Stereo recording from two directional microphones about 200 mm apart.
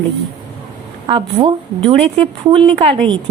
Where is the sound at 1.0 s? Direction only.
25° right (ahead or behind).